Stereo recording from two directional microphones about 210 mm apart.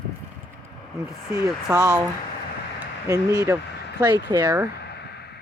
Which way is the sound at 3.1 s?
15° right (ahead or behind).